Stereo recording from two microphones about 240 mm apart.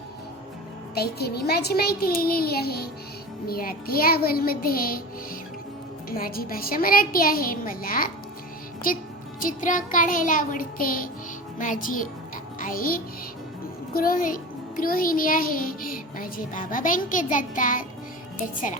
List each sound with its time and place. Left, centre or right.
0.9 s a child's voice: left
6.1 s a child's voice: left